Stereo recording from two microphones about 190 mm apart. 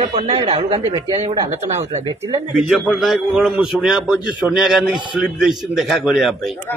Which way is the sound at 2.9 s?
Centre (ahead or behind).